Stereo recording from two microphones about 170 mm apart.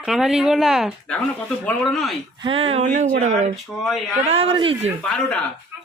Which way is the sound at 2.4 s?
35° right (ahead or behind).